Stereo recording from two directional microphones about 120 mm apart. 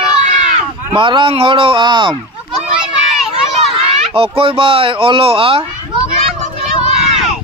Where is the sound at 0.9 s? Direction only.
45° right (ahead or behind).